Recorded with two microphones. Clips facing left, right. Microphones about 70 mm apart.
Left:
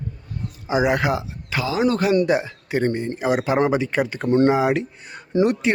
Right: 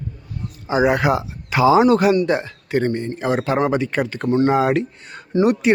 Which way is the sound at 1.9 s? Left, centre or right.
Centre.